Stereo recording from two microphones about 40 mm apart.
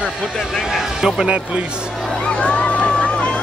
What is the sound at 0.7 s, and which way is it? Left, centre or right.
Speech, centre.